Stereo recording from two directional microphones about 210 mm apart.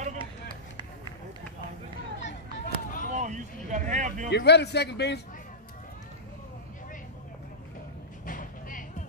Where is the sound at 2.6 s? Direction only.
40° left (ahead or behind).